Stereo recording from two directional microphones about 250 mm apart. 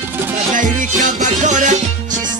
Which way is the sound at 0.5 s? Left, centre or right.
Right.